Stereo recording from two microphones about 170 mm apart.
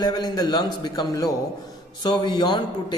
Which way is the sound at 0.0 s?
25° left (ahead or behind).